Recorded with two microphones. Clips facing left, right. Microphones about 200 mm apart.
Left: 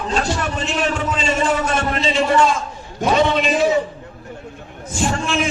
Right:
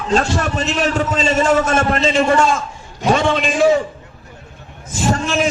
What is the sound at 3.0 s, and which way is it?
Speech, 50° left (ahead or behind).